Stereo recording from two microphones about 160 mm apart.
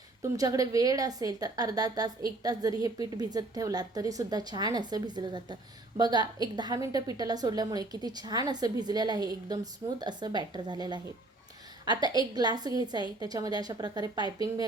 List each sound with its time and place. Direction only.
0.2 s a woman's voice: 20° right (ahead or behind)